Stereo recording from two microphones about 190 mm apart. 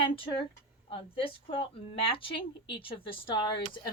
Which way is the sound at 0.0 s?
30° left (ahead or behind).